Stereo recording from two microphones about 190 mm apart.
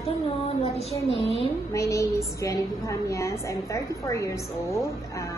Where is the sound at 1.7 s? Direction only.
15° left (ahead or behind).